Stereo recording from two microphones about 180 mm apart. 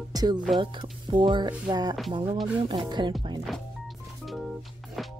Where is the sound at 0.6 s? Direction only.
25° right (ahead or behind).